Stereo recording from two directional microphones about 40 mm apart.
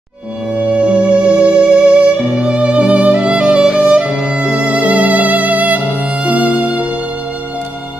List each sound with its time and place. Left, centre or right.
0.7 s music: right